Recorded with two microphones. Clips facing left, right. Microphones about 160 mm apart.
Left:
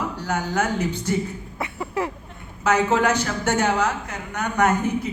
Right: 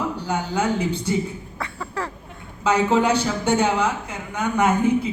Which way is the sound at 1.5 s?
20° left (ahead or behind).